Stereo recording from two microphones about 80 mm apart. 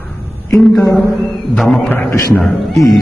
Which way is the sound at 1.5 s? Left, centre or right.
Centre.